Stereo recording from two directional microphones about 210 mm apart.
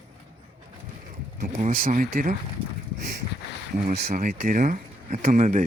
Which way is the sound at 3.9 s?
40° right (ahead or behind).